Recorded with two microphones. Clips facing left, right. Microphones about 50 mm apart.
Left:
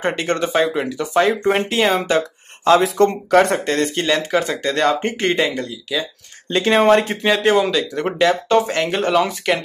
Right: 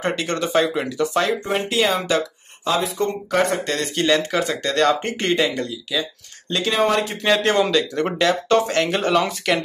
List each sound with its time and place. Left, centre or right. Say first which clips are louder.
0.2 s speech: left 2 dB; left
1.4 s speech: left 4 dB; left
2.6 s speech: left 8 dB; left
4.0 s speech: left 1 dB; centre
6.6 s speech: left 6 dB; left
7.2 s speech: left 1 dB; centre